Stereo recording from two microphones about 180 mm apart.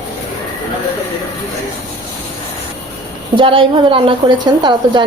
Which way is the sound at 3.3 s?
30° right (ahead or behind).